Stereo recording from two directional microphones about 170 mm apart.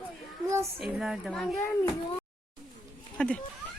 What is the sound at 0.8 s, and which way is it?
Speech, 5° right (ahead or behind).